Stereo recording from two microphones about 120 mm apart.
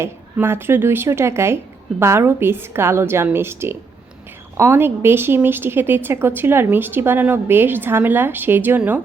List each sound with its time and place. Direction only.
0.3 s a woman's voice: 20° right (ahead or behind)